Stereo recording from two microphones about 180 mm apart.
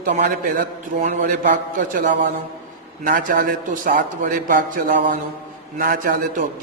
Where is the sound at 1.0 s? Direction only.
65° right (ahead or behind).